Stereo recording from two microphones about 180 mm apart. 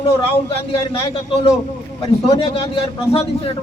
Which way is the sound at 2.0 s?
30° left (ahead or behind).